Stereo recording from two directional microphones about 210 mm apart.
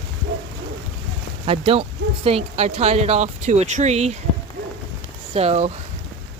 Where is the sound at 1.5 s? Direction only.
25° right (ahead or behind).